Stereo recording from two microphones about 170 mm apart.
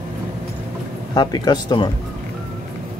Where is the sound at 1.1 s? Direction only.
25° left (ahead or behind).